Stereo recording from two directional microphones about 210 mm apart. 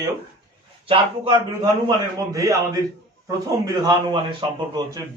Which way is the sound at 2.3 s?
15° right (ahead or behind).